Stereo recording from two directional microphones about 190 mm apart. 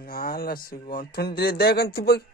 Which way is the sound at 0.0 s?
50° left (ahead or behind).